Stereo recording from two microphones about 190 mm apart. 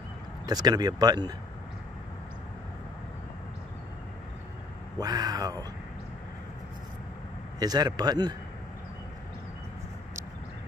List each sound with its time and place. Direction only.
0.5 s speech: 20° right (ahead or behind)
4.9 s speech: 20° right (ahead or behind)
7.5 s speech: 20° right (ahead or behind)